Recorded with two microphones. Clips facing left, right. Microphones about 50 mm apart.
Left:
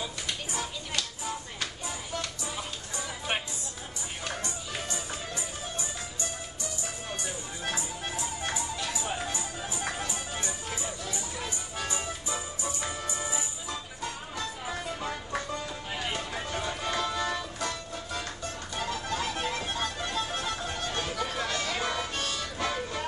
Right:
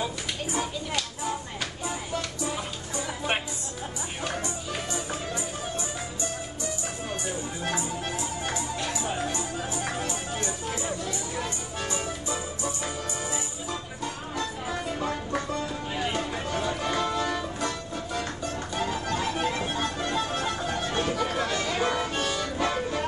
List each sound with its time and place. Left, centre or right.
4.2 s music: centre
7.1 s music: centre
18.8 s music: centre